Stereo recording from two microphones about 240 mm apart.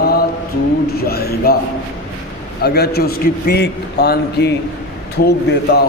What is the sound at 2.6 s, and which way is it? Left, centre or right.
A man's voice, left.